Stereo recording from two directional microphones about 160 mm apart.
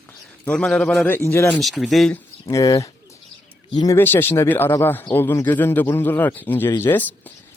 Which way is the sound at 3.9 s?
15° left (ahead or behind).